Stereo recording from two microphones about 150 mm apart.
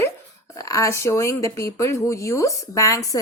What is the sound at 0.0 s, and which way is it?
Speech, 20° left (ahead or behind).